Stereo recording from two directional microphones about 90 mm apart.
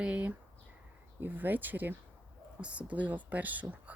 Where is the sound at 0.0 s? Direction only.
15° right (ahead or behind).